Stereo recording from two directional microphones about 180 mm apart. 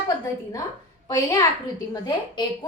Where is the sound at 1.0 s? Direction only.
20° left (ahead or behind).